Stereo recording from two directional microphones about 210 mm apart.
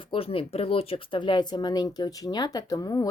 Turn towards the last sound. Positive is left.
turn(degrees=15)  # may be behind; listen again after turning